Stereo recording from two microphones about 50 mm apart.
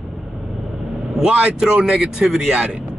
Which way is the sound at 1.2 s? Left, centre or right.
Centre.